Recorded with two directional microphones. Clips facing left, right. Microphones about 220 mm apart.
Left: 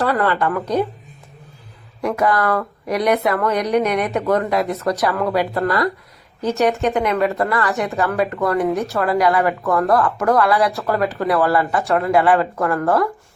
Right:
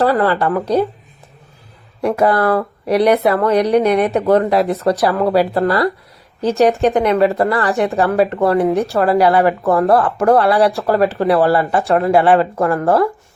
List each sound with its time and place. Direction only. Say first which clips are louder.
0.0 s a woman's voice: right 4 dB; 30° right (ahead or behind)
2.0 s a woman's voice: right 4 dB; 30° right (ahead or behind)